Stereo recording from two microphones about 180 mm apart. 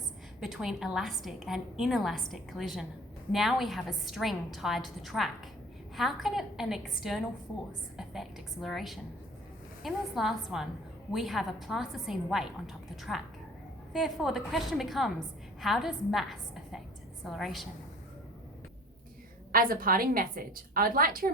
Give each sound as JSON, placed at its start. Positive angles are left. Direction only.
{"t": 0.3, "sound": "a woman's voice", "side_deg": 0}
{"t": 19.5, "sound": "a woman's voice", "side_deg": -50}